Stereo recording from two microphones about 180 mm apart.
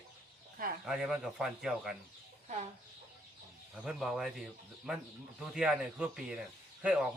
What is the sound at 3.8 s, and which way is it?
Speech, 5° right (ahead or behind).